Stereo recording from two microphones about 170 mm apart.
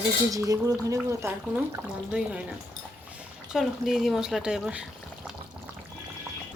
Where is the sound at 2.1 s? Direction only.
5° right (ahead or behind).